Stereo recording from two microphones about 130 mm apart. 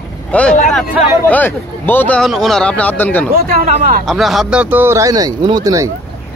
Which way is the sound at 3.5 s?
90° right.